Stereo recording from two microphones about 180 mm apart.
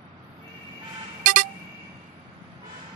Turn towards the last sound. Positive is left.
turn(degrees=-45)  # may be behind; listen again after turning